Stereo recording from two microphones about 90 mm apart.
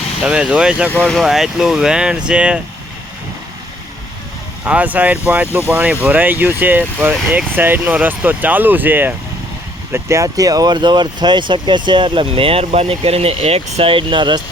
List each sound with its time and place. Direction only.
0.3 s speech: 10° right (ahead or behind)
4.6 s speech: 15° right (ahead or behind)
9.9 s speech: 35° right (ahead or behind); by 13.1 s 90° right
13.8 s speech: 70° right (ahead or behind)